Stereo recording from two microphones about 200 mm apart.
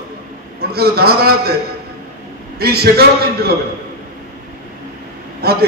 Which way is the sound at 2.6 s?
50° right (ahead or behind).